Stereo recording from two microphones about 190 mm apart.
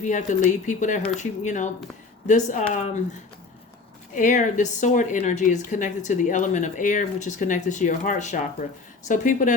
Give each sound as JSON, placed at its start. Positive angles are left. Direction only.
{"t": 0.0, "sound": "a woman's voice", "side_deg": 40}
{"t": 4.1, "sound": "a woman's voice", "side_deg": 40}